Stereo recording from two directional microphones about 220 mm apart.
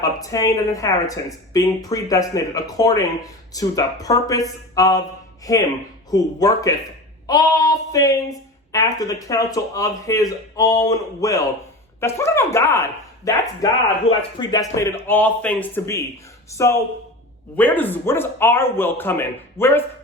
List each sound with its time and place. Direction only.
0.0 s a woman's voice: 15° left (ahead or behind)
14.0 s a woman's voice: 25° left (ahead or behind)